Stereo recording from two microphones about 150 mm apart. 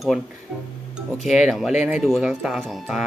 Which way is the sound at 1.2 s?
Centre (ahead or behind).